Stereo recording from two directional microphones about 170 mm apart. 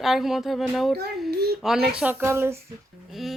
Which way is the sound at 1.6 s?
5° right (ahead or behind).